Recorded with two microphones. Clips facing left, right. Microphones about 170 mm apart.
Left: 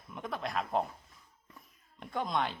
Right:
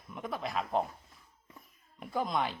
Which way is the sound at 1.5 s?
5° right (ahead or behind).